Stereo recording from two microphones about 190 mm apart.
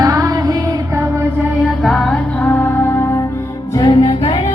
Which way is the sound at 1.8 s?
5° left (ahead or behind).